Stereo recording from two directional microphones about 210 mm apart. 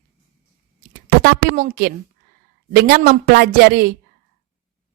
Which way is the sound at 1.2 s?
45° right (ahead or behind).